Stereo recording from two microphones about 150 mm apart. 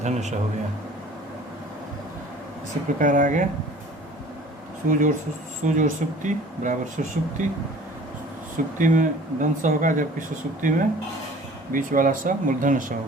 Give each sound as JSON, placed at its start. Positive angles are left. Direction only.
{"t": 0.0, "sound": "a man's voice", "side_deg": -50}
{"t": 3.0, "sound": "speech", "side_deg": -60}
{"t": 4.9, "sound": "speech", "side_deg": -60}
{"t": 8.8, "sound": "speech", "side_deg": -60}